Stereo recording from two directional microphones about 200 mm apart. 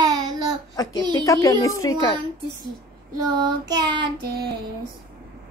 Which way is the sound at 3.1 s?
20° right (ahead or behind).